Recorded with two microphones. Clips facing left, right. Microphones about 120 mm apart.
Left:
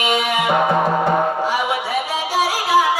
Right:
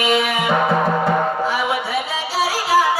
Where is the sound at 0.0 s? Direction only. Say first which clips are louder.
Right 1 dB; 15° left (ahead or behind).